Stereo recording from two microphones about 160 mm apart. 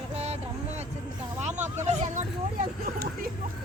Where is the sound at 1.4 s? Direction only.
45° right (ahead or behind).